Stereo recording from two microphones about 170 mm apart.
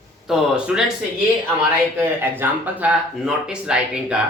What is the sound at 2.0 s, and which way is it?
Speech, 10° right (ahead or behind).